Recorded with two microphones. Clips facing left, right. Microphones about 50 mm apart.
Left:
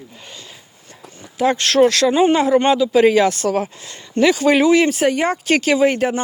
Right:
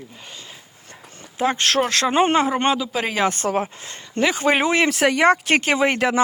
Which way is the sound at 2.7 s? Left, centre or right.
Centre.